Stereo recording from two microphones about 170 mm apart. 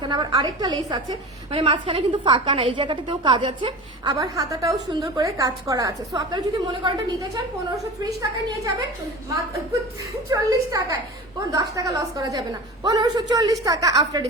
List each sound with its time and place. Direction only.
0.0 s a woman's voice: 25° right (ahead or behind)
10.2 s a woman's voice: 20° right (ahead or behind)